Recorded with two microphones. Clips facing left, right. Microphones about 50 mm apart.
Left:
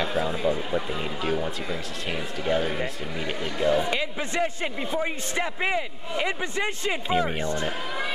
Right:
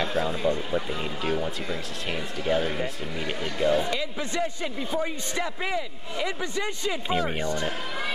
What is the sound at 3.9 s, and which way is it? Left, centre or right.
A man's voice, left.